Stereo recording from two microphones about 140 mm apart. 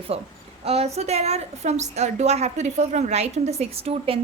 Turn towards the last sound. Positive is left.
turn(degrees=-45)  # may be behind; listen again after turning